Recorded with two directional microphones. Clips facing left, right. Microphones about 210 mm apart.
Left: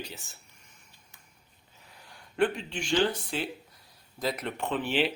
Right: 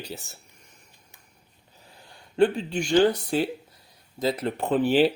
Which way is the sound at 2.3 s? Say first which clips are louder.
Right 6 dB; 30° right (ahead or behind).